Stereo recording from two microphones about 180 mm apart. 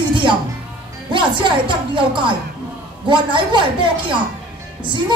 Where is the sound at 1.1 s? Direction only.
25° right (ahead or behind).